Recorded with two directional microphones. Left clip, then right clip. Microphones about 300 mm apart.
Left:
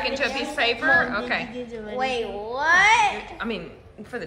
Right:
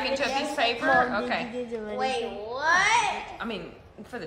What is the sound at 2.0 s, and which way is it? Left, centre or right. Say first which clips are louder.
A child's voice: left 4 dB; centre.